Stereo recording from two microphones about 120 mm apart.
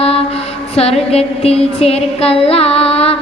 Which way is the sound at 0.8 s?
55° left (ahead or behind).